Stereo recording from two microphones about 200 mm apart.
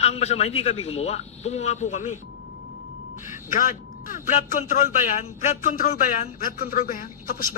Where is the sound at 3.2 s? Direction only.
40° left (ahead or behind).